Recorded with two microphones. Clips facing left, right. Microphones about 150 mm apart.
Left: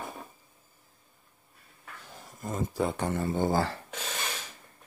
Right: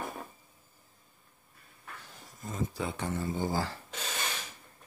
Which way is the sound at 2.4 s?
50° left (ahead or behind).